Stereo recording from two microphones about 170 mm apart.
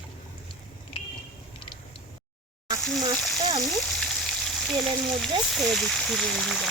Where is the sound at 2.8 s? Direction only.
5° left (ahead or behind).